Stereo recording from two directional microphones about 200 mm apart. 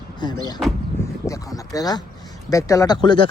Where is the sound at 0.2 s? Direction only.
20° left (ahead or behind).